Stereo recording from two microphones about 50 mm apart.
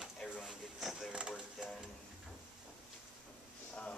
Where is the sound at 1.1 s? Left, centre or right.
Centre.